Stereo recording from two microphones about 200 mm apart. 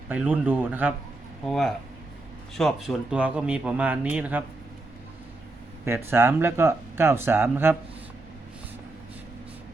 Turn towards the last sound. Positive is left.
turn(degrees=-10)  # may be behind; listen again after turning